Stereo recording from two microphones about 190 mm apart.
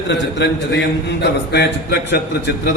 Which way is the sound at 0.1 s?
65° left (ahead or behind).